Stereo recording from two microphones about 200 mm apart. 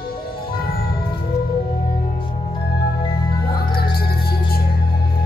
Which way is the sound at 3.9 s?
50° left (ahead or behind).